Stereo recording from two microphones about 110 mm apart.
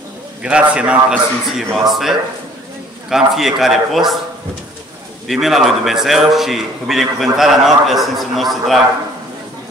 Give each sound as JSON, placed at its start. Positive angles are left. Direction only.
{"t": 0.4, "sound": "a man's voice", "side_deg": -10}
{"t": 5.3, "sound": "a man's voice", "side_deg": 0}